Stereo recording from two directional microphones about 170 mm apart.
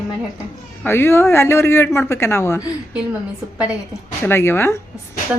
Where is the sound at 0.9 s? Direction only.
15° left (ahead or behind).